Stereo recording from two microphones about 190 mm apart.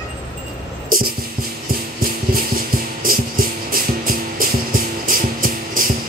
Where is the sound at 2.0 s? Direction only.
50° right (ahead or behind).